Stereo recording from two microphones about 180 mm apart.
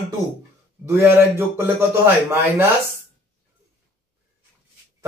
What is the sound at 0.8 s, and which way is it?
A man's voice, 15° right (ahead or behind).